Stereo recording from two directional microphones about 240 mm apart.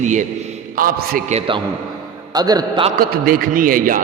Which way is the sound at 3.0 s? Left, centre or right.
Right.